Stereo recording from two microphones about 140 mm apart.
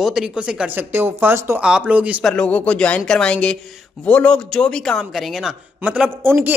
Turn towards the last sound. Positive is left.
turn(degrees=-15)  # may be behind; listen again after turning